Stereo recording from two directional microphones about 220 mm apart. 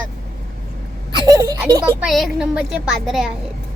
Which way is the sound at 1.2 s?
15° right (ahead or behind).